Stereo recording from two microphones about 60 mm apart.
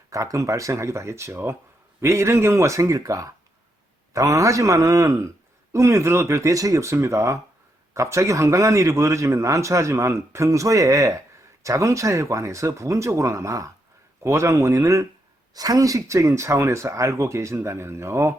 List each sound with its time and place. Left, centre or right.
0.1 s a man's voice: right
1.3 s speech: right
2.0 s a man's voice: right
15.5 s speech: right